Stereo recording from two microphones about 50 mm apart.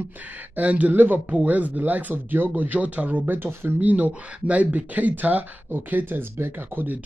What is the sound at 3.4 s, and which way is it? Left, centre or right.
Speech, right.